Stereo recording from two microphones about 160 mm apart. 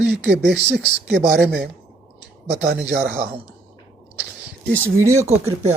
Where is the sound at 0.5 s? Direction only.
90° right.